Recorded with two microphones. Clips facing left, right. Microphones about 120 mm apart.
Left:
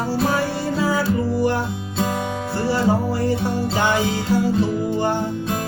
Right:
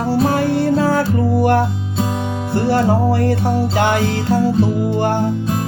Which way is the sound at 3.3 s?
60° right (ahead or behind).